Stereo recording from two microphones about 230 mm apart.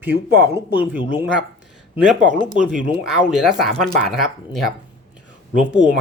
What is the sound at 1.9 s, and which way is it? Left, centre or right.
Speech, centre.